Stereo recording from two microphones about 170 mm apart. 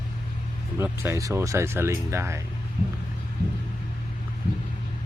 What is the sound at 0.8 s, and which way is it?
Speech, 15° right (ahead or behind).